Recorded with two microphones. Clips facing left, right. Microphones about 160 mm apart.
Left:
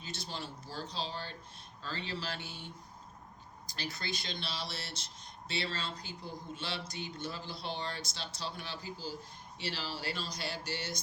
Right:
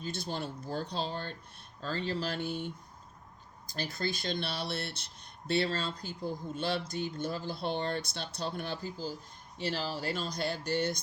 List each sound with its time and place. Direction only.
0.0 s speech: 50° right (ahead or behind)